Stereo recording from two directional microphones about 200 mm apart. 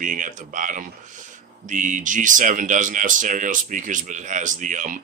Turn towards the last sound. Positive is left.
turn(degrees=-40)  # may be behind; listen again after turning